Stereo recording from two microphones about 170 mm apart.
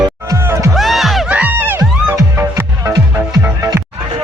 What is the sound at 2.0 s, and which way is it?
Music, 15° right (ahead or behind).